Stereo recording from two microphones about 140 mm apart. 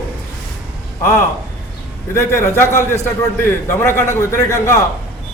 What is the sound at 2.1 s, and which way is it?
A man's voice, 20° left (ahead or behind).